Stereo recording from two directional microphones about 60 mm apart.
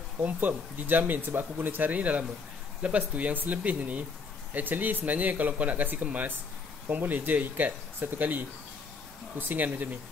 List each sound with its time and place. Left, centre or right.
0.2 s speech: right